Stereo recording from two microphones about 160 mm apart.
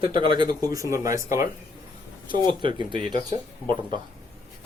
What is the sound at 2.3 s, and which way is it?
Speech, 30° right (ahead or behind).